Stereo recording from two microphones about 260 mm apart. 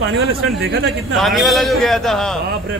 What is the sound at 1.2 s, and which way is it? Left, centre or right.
A man's voice, centre.